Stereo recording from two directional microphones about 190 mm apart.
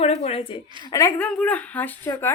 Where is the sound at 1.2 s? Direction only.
5° left (ahead or behind).